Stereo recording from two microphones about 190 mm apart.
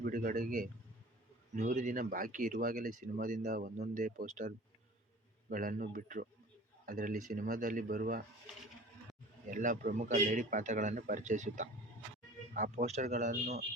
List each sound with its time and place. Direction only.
0.0 s speech: 45° right (ahead or behind)
9.5 s a man's voice: 45° right (ahead or behind)